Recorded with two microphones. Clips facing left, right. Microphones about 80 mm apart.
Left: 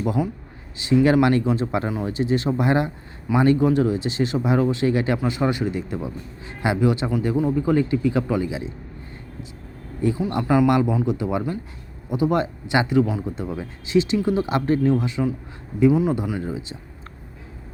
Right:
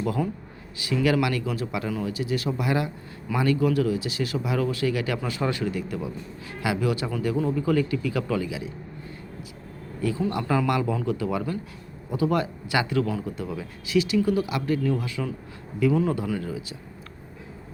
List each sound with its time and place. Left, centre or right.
0.0 s speech: centre
10.0 s speech: left
14.4 s speech: left
14.9 s speech: left